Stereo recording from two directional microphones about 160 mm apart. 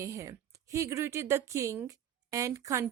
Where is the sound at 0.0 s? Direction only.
20° right (ahead or behind).